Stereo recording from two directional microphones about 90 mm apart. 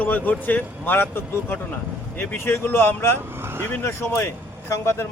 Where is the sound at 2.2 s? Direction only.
25° left (ahead or behind).